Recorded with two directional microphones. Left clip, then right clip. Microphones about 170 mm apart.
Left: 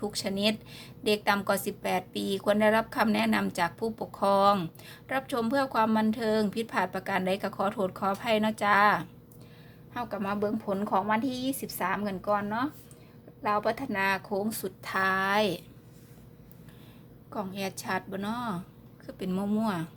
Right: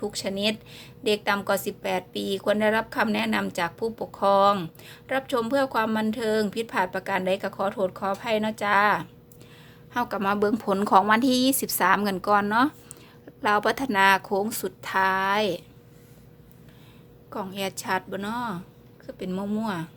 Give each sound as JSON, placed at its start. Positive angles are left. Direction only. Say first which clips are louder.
{"t": 0.0, "sound": "a woman's voice", "louder": "right 2 dB", "side_deg": -5}
{"t": 9.9, "sound": "a woman's voice", "louder": "right 7 dB", "side_deg": -25}
{"t": 17.3, "sound": "a woman's voice", "louder": "right 4 dB", "side_deg": -10}